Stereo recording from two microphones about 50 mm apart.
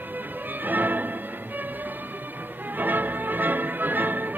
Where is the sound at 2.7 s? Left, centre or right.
Right.